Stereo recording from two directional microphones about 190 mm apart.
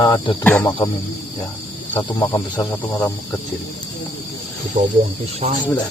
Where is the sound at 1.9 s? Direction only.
15° left (ahead or behind).